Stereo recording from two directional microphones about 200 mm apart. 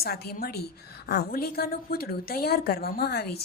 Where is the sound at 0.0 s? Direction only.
50° left (ahead or behind).